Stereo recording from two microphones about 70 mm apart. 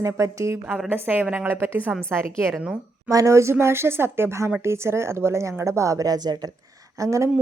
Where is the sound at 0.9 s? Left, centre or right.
Right.